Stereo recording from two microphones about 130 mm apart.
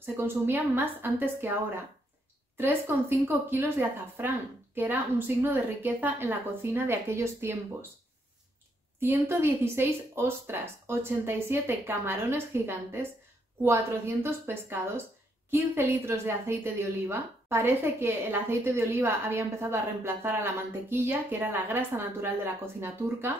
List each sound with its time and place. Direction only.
0.0 s a woman's voice: 15° right (ahead or behind)
9.0 s a woman's voice: 20° right (ahead or behind)